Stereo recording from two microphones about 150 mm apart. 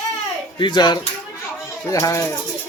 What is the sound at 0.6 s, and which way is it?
A man's voice, 30° left (ahead or behind).